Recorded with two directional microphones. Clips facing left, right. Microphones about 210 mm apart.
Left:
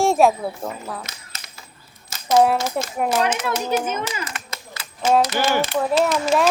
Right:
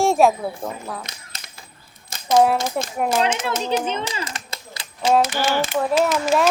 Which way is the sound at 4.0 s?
25° right (ahead or behind).